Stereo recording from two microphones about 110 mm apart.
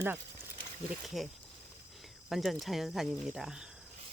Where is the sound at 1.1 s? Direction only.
Centre (ahead or behind).